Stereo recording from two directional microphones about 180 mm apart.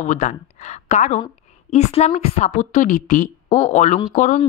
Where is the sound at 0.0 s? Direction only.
45° left (ahead or behind).